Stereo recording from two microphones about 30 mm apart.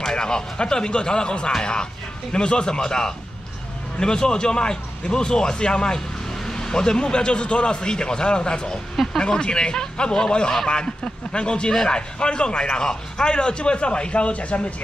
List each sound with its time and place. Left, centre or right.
0.0 s a man's voice: left
8.9 s speech: centre
9.2 s a man's voice: left